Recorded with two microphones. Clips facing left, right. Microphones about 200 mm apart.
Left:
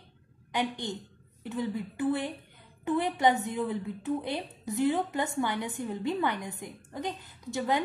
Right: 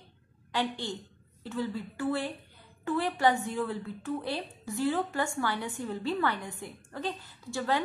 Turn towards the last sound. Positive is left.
turn(degrees=20)  # may be behind; listen again after turning